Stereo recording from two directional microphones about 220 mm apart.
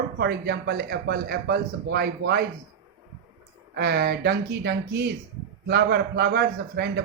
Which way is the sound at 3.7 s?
50° right (ahead or behind).